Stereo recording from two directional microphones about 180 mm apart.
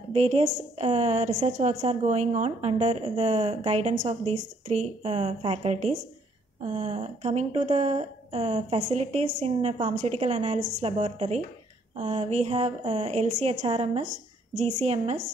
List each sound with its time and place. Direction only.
0.1 s a woman's voice: 35° right (ahead or behind)